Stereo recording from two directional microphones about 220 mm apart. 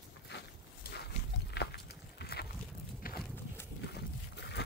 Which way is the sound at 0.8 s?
45° left (ahead or behind).